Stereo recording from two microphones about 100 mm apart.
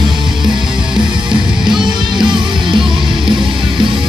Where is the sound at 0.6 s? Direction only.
5° right (ahead or behind).